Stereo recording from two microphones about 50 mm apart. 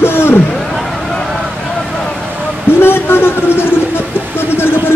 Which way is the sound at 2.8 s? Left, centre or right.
Left.